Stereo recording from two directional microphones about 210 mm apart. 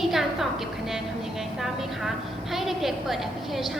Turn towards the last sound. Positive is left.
turn(degrees=0)  # may be behind; listen again after turning